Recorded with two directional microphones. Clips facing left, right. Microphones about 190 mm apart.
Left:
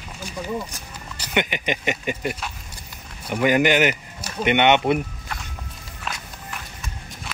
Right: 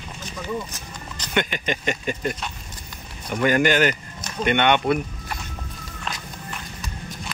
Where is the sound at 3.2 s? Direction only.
10° left (ahead or behind).